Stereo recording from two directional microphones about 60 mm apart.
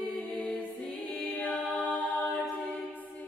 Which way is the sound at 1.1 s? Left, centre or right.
Left.